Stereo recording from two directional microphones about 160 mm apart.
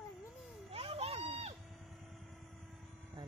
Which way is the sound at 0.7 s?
35° right (ahead or behind).